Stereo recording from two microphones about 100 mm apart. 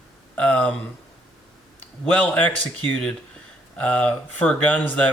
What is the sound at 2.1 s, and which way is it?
Speech, 15° left (ahead or behind).